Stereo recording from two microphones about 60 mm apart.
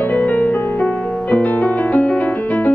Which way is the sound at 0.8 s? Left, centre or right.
Centre.